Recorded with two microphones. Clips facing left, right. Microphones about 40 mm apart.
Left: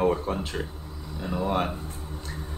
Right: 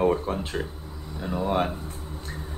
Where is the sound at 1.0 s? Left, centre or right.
Right.